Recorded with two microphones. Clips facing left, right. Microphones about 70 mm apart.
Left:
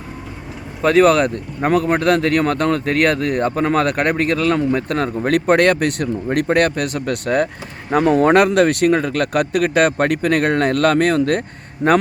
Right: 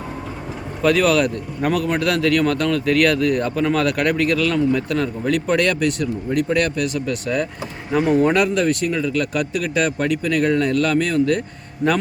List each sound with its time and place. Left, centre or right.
0.8 s speech: left